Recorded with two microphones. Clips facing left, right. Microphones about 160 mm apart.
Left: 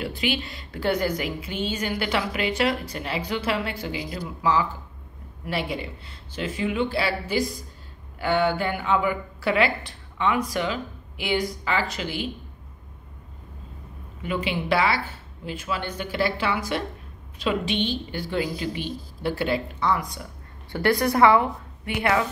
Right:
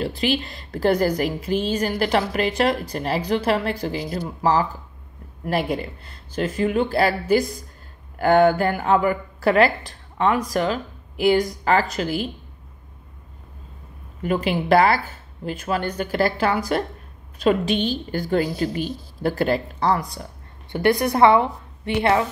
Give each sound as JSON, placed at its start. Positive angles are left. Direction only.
{"t": 0.0, "sound": "a woman's voice", "side_deg": -40}
{"t": 14.2, "sound": "speech", "side_deg": -45}
{"t": 20.7, "sound": "a woman's voice", "side_deg": -20}